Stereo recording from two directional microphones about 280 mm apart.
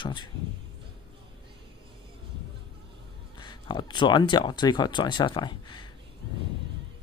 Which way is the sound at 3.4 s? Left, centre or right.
Centre.